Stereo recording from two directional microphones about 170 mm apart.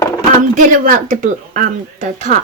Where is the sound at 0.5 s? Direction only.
50° right (ahead or behind).